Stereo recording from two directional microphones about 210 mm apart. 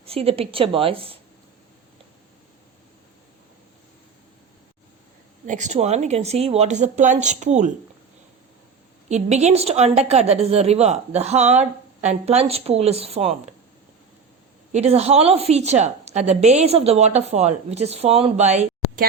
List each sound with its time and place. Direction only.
0.0 s a woman's voice: 25° right (ahead or behind)
5.5 s a woman's voice: 35° right (ahead or behind)
9.0 s a woman's voice: 35° right (ahead or behind)
14.7 s a woman's voice: 30° right (ahead or behind)